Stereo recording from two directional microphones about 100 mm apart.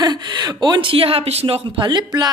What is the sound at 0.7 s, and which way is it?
Speech, 65° right (ahead or behind).